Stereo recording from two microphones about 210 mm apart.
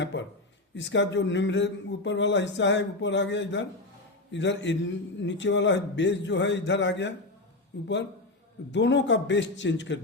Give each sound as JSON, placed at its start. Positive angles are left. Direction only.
{"t": 0.0, "sound": "a man's voice", "side_deg": 60}
{"t": 8.7, "sound": "speech", "side_deg": 60}